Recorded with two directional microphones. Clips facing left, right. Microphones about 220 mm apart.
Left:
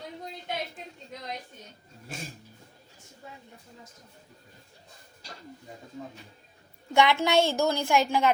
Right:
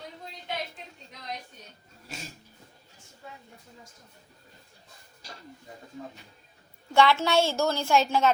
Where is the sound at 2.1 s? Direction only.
50° left (ahead or behind).